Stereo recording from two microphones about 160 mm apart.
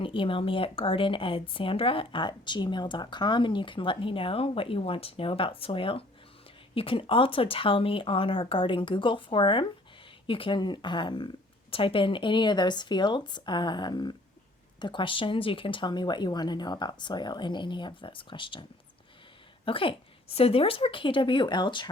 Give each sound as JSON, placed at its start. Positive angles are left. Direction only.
{"t": 0.0, "sound": "speech", "side_deg": 35}
{"t": 19.6, "sound": "speech", "side_deg": 35}